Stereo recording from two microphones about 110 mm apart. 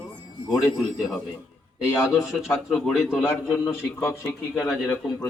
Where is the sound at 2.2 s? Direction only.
Centre (ahead or behind).